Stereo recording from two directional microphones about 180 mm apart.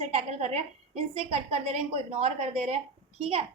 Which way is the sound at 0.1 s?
35° right (ahead or behind).